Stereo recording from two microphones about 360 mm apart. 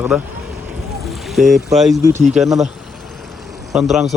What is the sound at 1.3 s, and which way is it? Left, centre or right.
Speech, centre.